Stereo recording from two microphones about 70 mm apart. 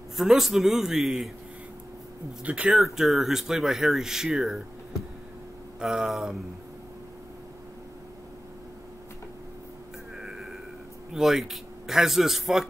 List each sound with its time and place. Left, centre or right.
0.2 s speech: centre
2.4 s speech: centre
2.7 s speech: centre
5.8 s speech: centre
10.1 s a sound: centre
11.1 s speech: centre